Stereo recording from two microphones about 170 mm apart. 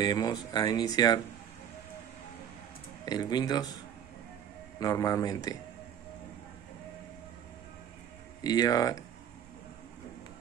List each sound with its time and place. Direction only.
0.0 s speech: 20° left (ahead or behind)
3.1 s speech: 25° left (ahead or behind)
4.7 s speech: 20° left (ahead or behind)
8.5 s speech: 25° left (ahead or behind)